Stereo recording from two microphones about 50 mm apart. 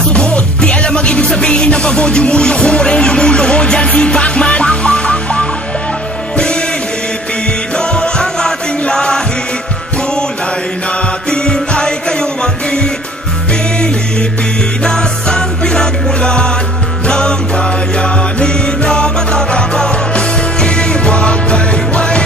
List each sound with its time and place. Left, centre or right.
0.1 s music: left
7.8 s music: centre
11.3 s music: centre